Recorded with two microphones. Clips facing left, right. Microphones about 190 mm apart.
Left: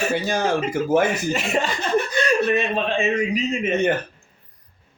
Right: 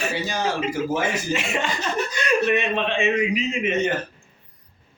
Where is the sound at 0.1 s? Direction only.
50° left (ahead or behind).